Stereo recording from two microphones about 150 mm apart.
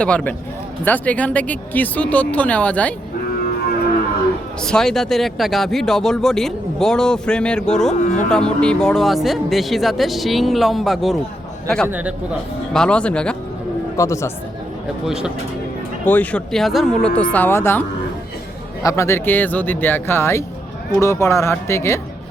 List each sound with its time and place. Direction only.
0.0 s speech: 5° left (ahead or behind)
4.6 s speech: 5° left (ahead or behind)
8.0 s speech: 55° left (ahead or behind)
8.3 s a man's voice: 5° left (ahead or behind); by 12.1 s 10° right (ahead or behind)
12.7 s speech: 5° left (ahead or behind)
13.9 s speech: 20° left (ahead or behind)
15.0 s speech: 5° right (ahead or behind)
16.0 s speech: 10° left (ahead or behind)
17.2 s speech: 10° left (ahead or behind)